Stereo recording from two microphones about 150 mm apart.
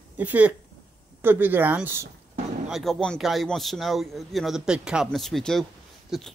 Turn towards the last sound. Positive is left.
turn(degrees=0)  # may be behind; listen again after turning